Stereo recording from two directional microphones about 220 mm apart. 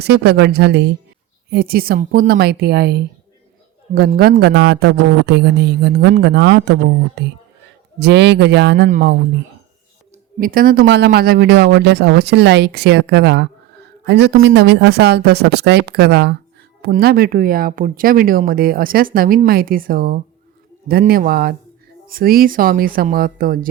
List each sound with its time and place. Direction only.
0.0 s speech: 50° right (ahead or behind)
10.4 s speech: 40° right (ahead or behind)